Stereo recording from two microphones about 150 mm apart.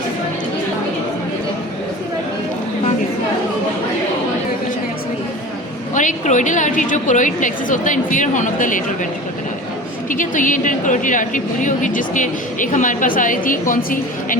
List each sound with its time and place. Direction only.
5.9 s a woman's voice: 60° left (ahead or behind)
10.1 s a woman's voice: 60° left (ahead or behind)